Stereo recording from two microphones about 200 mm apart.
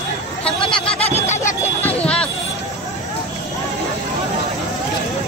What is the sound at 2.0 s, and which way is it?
Music, 5° left (ahead or behind).